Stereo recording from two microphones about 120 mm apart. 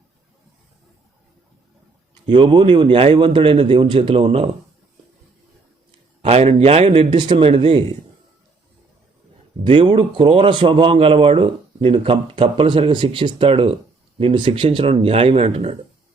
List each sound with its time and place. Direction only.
2.2 s a man's voice: 40° right (ahead or behind)
6.2 s a man's voice: 55° right (ahead or behind)
9.6 s a man's voice: 45° right (ahead or behind); by 15.7 s 60° right (ahead or behind)